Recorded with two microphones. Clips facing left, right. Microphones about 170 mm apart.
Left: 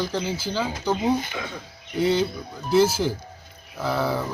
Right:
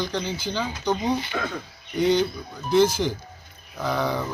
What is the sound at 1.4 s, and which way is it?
Speech, 60° right (ahead or behind).